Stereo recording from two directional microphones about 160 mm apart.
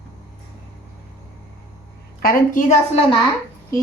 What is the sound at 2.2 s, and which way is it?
Speech, 60° left (ahead or behind).